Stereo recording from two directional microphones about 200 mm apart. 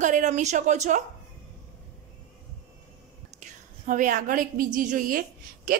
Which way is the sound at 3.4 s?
40° right (ahead or behind).